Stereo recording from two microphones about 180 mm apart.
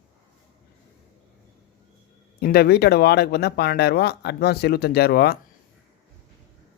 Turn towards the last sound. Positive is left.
turn(degrees=60)  # may be behind; listen again after turning